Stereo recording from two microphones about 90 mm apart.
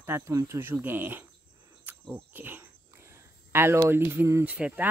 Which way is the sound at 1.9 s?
20° right (ahead or behind).